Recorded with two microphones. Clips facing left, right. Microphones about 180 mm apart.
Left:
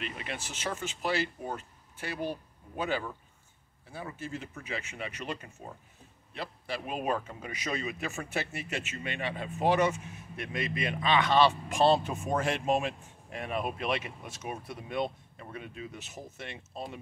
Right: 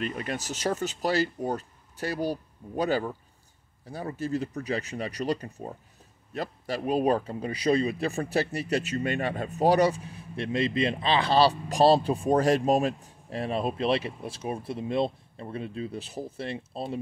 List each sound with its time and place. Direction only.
0.0 s speech: 40° right (ahead or behind)